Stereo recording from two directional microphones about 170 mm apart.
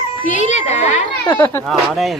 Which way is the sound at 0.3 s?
45° left (ahead or behind).